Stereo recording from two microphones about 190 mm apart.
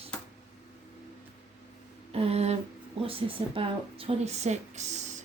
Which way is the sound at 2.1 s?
30° right (ahead or behind).